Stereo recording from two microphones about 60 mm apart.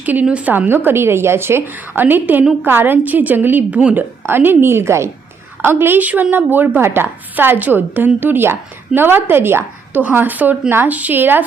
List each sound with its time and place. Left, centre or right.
0.0 s a woman's voice: right
0.5 s speech: right
4.3 s a woman's voice: right
5.6 s speech: right
6.0 s speech: right
9.9 s speech: right